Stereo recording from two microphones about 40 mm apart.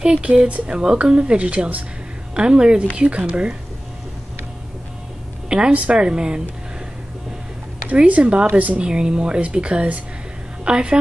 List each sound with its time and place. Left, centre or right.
0.0 s speech: right
5.7 s speech: right
7.9 s a woman's voice: right